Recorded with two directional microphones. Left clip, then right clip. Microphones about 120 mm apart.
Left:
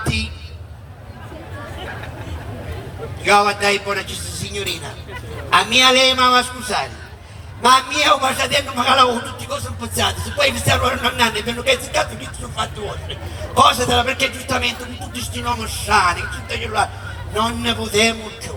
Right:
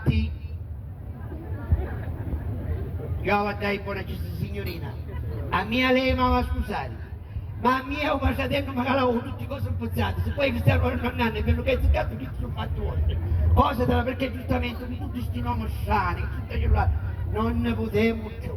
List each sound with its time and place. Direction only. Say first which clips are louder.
0.0 s a sound: left 8 dB; 50° left (ahead or behind)
3.2 s a man's voice: left 11 dB; 45° left (ahead or behind)
5.5 s a man's voice: left 10 dB; 45° left (ahead or behind)
13.5 s a man's voice: left 10 dB; 40° left (ahead or behind)